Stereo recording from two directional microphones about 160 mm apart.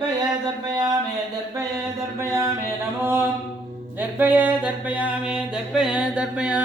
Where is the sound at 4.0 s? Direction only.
10° right (ahead or behind).